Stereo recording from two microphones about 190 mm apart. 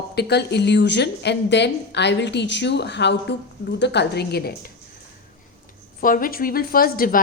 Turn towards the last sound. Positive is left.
turn(degrees=50)  # may be behind; listen again after turning